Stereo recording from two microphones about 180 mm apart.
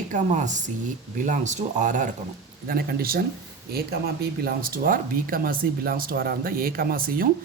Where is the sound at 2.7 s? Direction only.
60° right (ahead or behind).